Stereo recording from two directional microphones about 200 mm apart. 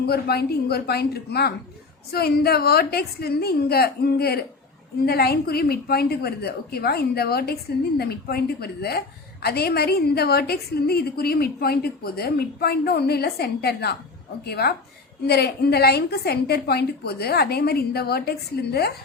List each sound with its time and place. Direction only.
0.0 s a woman's voice: 50° left (ahead or behind)